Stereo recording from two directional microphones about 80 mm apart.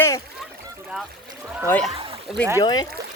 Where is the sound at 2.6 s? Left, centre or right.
Left.